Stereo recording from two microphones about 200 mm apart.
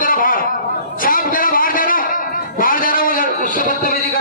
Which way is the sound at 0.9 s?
45° left (ahead or behind).